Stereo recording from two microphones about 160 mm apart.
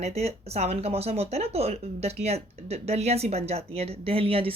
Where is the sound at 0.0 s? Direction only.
40° right (ahead or behind).